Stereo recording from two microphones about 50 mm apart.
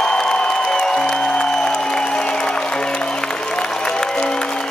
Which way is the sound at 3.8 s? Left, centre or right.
Centre.